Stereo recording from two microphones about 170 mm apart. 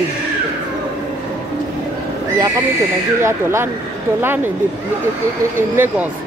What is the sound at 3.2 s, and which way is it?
Speech, 15° right (ahead or behind).